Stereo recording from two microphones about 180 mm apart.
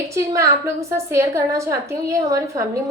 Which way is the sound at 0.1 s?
15° right (ahead or behind).